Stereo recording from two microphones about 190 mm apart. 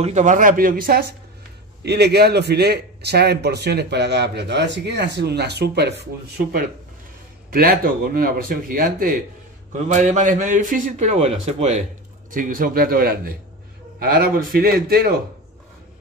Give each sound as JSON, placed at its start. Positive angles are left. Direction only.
{"t": 0.0, "sound": "a man's voice", "side_deg": -40}
{"t": 12.3, "sound": "speech", "side_deg": -45}